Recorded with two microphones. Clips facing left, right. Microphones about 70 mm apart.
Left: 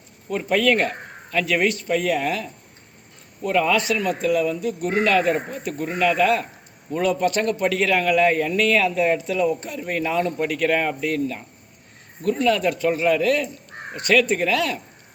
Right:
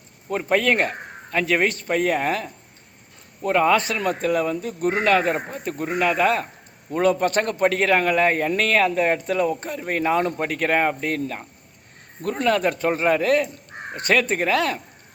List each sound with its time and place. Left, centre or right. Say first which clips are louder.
0.3 s speech: left 1 dB; right